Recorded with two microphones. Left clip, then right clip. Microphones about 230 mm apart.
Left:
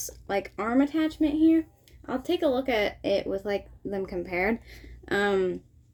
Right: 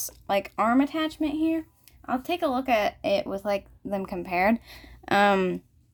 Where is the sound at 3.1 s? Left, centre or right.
Right.